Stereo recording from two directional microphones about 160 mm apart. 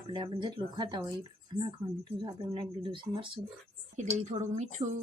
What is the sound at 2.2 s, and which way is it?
Speech, 30° right (ahead or behind).